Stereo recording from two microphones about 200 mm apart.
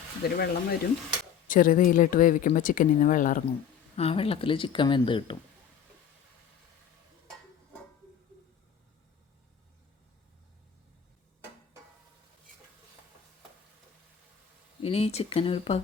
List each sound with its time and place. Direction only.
0.3 s speech: 50° left (ahead or behind)
3.9 s speech: 30° left (ahead or behind)
14.8 s speech: 30° left (ahead or behind)